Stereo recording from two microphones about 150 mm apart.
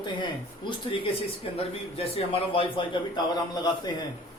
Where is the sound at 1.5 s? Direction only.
40° left (ahead or behind).